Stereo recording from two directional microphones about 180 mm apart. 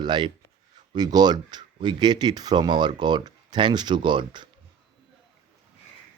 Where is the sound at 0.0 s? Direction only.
25° right (ahead or behind).